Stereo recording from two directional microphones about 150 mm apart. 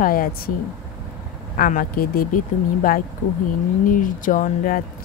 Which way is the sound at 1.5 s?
70° left (ahead or behind).